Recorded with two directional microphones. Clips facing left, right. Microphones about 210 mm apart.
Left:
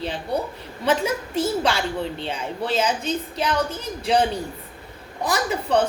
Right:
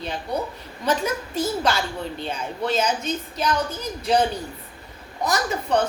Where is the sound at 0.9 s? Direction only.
30° left (ahead or behind).